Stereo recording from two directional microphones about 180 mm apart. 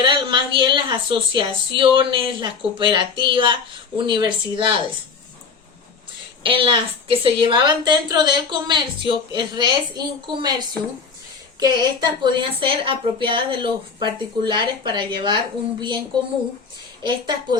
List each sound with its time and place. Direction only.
0.0 s a woman's voice: 25° right (ahead or behind)
6.4 s a woman's voice: 30° right (ahead or behind)
11.6 s a woman's voice: 25° right (ahead or behind)
17.0 s a woman's voice: 25° right (ahead or behind)